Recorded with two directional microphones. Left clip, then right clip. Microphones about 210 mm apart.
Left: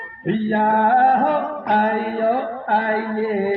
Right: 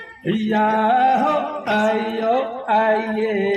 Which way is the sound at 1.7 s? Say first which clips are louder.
Left 1 dB; 15° left (ahead or behind).